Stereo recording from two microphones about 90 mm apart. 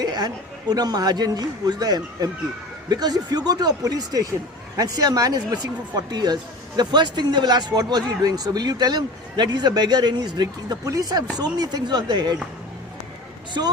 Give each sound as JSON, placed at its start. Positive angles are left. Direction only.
{"t": 0.0, "sound": "chatter", "side_deg": -50}
{"t": 0.7, "sound": "speech", "side_deg": -45}
{"t": 13.6, "sound": "speech", "side_deg": -50}